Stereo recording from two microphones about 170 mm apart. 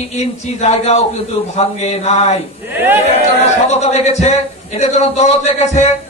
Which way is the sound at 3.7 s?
40° left (ahead or behind).